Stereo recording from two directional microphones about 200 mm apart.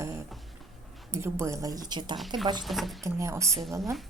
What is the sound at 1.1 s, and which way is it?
A woman's voice, 15° right (ahead or behind).